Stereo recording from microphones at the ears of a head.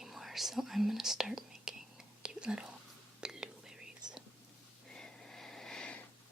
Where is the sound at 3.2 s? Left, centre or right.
Centre.